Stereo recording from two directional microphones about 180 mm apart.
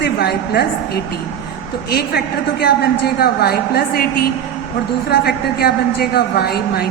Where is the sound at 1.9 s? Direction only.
60° left (ahead or behind).